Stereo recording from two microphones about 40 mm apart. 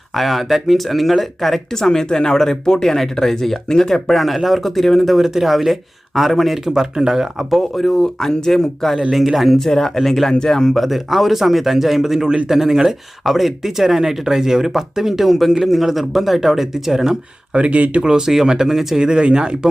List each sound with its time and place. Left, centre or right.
0.1 s a man's voice: centre
1.7 s a man's voice: centre
7.3 s a man's voice: centre
9.6 s a man's voice: centre
10.3 s a man's voice: centre
13.2 s a man's voice: centre
17.5 s speech: right
18.0 s speech: centre
18.9 s speech: right